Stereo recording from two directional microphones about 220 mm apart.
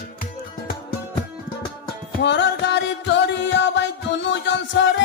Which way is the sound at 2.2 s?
50° left (ahead or behind).